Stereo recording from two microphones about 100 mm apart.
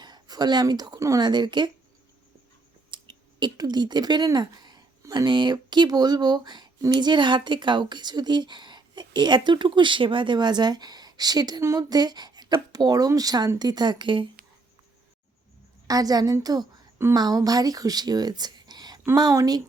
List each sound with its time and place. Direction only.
0.0 s speech: 45° right (ahead or behind)
1.2 s speech: 45° right (ahead or behind)
2.9 s a woman's voice: 50° right (ahead or behind)
15.9 s a woman's voice: 40° right (ahead or behind)